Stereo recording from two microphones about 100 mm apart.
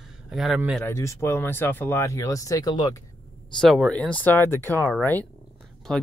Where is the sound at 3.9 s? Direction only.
15° left (ahead or behind).